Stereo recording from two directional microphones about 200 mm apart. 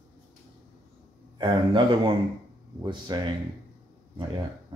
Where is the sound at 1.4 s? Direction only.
25° right (ahead or behind).